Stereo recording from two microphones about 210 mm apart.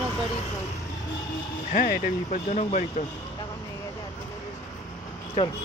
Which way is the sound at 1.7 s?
40° left (ahead or behind).